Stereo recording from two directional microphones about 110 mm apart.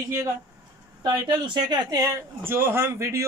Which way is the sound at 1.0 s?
40° right (ahead or behind).